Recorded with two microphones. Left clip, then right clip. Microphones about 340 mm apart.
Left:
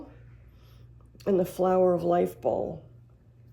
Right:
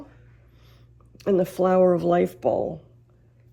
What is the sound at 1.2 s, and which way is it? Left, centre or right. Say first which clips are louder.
Speech: right 4 dB; right.